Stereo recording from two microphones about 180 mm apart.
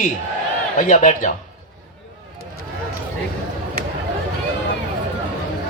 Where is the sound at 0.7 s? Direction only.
45° left (ahead or behind).